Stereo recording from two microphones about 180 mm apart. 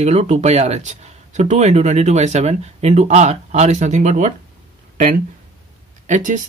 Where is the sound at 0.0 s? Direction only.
35° right (ahead or behind).